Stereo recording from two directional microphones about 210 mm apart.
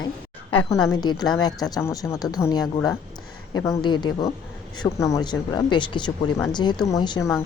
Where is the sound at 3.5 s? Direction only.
15° left (ahead or behind).